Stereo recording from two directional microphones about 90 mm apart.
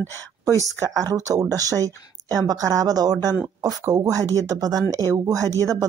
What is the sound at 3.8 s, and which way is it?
Speech, 35° right (ahead or behind).